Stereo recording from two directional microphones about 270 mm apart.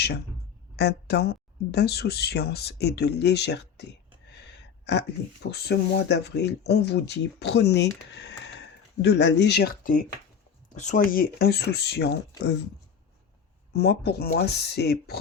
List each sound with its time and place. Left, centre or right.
0.8 s speech: left
4.9 s speech: left
13.7 s speech: left